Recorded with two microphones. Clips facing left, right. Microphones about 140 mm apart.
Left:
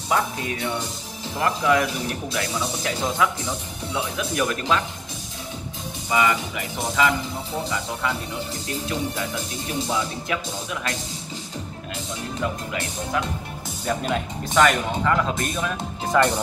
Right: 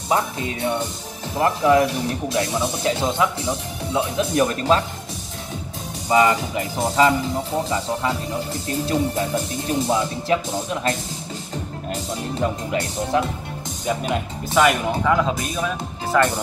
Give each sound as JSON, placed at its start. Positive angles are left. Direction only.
{"t": 0.1, "sound": "speech", "side_deg": -25}
{"t": 6.0, "sound": "speech", "side_deg": -40}
{"t": 8.8, "sound": "speech", "side_deg": -40}
{"t": 9.9, "sound": "speech", "side_deg": -30}
{"t": 13.8, "sound": "speech", "side_deg": -10}